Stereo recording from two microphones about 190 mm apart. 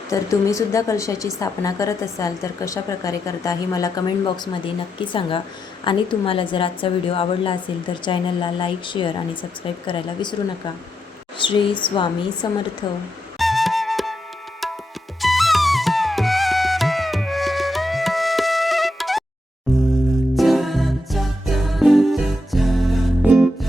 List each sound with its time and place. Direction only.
0.1 s a woman's voice: 15° left (ahead or behind)
11.3 s speech: 25° left (ahead or behind)
13.4 s flute: centre (ahead or behind)
15.2 s flute: centre (ahead or behind)
20.3 s music: centre (ahead or behind)